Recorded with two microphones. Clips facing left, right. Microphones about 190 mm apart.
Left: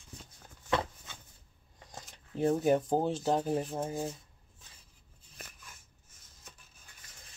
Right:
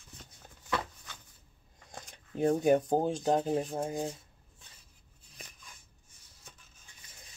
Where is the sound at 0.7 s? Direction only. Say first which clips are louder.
Left 3 dB; 25° left (ahead or behind).